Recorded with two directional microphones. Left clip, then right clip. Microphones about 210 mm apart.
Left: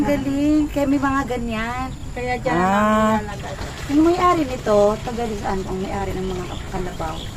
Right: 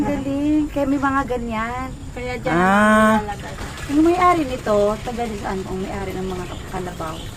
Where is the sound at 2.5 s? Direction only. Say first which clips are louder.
Right 4 dB; 25° right (ahead or behind).